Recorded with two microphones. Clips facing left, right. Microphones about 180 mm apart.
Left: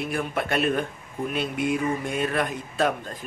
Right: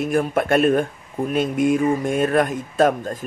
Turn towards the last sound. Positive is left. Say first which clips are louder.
# right 7 dB
turn(degrees=-45)  # may be behind; listen again after turning